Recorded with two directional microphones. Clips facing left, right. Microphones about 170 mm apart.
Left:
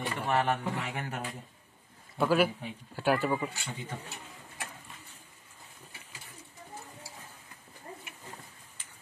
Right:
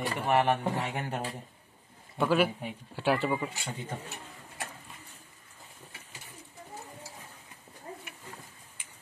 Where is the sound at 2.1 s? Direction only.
5° left (ahead or behind).